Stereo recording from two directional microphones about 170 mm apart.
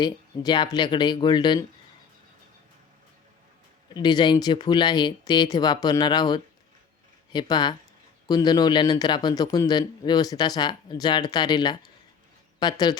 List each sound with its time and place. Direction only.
0.0 s a man's voice: 25° left (ahead or behind)
3.8 s a man's voice: 25° left (ahead or behind)